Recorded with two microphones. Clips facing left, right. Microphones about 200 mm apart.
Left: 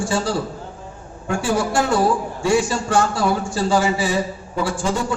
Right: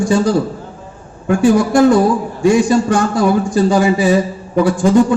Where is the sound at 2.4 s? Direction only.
15° right (ahead or behind).